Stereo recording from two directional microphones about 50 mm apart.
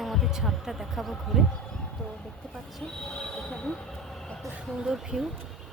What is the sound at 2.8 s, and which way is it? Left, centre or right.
Train wheels squealing, centre.